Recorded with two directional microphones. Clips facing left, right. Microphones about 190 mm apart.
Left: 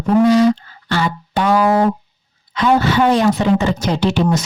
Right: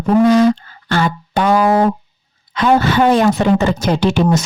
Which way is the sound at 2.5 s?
50° right (ahead or behind).